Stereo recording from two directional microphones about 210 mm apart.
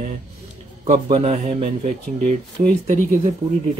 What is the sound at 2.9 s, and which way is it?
Speech, 35° right (ahead or behind).